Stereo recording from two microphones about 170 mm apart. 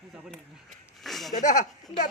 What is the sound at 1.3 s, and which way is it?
Speech, 45° left (ahead or behind).